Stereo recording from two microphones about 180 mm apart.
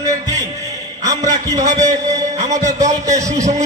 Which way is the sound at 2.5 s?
40° right (ahead or behind).